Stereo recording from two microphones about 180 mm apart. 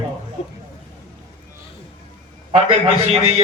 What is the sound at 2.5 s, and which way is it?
Speech, 35° right (ahead or behind).